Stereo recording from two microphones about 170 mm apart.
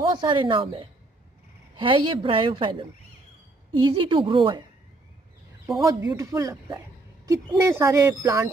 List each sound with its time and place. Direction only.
0.0 s speech: 30° right (ahead or behind)
5.9 s speech: 20° right (ahead or behind)